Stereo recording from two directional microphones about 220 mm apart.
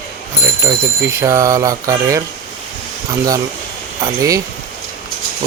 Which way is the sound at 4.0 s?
15° right (ahead or behind).